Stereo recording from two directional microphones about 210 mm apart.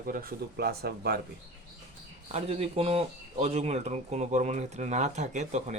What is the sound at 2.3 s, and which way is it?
Speech, 30° right (ahead or behind).